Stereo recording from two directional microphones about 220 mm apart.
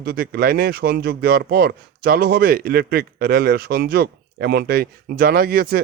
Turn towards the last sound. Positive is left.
turn(degrees=-45)  # may be behind; listen again after turning